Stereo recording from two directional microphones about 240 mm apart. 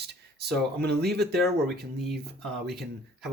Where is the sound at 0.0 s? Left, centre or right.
Right.